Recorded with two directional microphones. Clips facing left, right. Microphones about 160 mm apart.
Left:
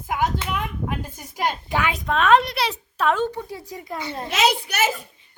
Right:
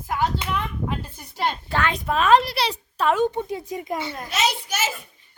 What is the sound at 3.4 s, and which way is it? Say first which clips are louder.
Speech: right 5 dB; 20° right (ahead or behind).